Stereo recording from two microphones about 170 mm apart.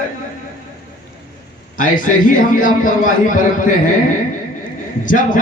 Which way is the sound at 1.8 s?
50° left (ahead or behind).